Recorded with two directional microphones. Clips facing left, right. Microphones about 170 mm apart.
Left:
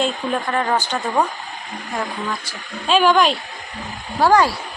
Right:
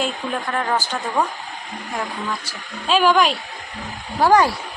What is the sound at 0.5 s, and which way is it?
Speech, centre (ahead or behind).